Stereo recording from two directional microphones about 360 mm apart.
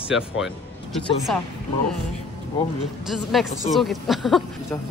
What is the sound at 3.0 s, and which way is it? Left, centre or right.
Speech, centre.